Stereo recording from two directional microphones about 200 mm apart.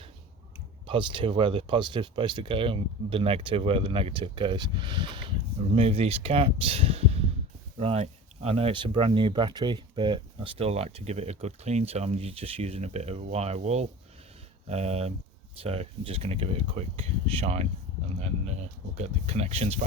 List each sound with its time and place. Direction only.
0.9 s speech: 25° right (ahead or behind)